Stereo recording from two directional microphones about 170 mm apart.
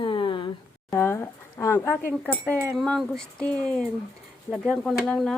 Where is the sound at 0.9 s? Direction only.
15° left (ahead or behind).